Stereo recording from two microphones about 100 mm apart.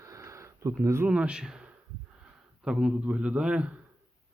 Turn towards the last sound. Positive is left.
turn(degrees=-10)  # may be behind; listen again after turning